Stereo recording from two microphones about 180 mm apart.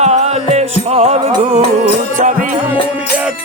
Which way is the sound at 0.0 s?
35° right (ahead or behind).